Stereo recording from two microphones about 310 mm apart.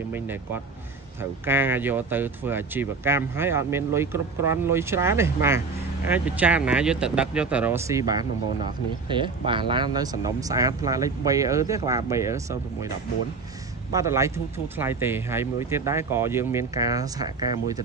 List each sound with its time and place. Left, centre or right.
0.1 s speech: centre
13.9 s speech: centre